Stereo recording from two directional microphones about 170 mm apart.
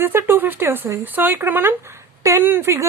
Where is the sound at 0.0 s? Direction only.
15° right (ahead or behind).